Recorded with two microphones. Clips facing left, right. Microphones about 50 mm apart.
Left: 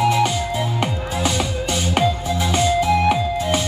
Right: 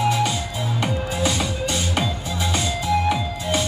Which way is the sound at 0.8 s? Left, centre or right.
Left.